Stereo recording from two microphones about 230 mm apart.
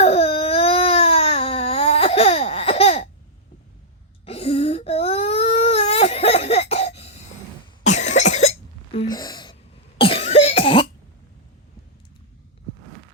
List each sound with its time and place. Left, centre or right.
0.0 s baby cry: left
4.3 s baby cry: left
7.9 s cough: left